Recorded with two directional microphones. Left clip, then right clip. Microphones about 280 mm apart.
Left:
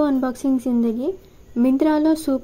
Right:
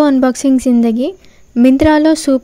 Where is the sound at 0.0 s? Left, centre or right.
Right.